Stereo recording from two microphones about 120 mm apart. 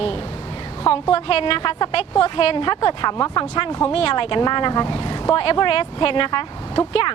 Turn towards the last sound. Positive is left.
turn(degrees=50)  # may be behind; listen again after turning